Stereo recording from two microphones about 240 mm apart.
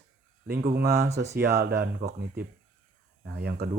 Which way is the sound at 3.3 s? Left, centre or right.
Right.